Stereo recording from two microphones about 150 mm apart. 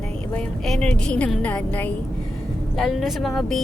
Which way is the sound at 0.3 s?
5° left (ahead or behind).